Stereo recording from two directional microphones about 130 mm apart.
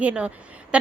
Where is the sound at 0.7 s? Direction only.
10° right (ahead or behind).